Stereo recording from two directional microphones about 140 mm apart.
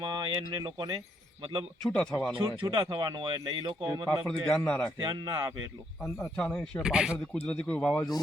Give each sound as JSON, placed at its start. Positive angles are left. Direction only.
{"t": 0.0, "sound": "speech", "side_deg": -35}
{"t": 1.8, "sound": "speech", "side_deg": 5}
{"t": 2.6, "sound": "speech", "side_deg": -35}
{"t": 4.1, "sound": "a man's voice", "side_deg": 5}
{"t": 4.9, "sound": "speech", "side_deg": -30}
{"t": 6.3, "sound": "speech", "side_deg": 10}
{"t": 6.8, "sound": "a man's voice", "side_deg": -5}
{"t": 7.3, "sound": "speech", "side_deg": 10}